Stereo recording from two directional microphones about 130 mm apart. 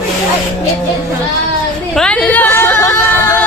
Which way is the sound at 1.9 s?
5° left (ahead or behind).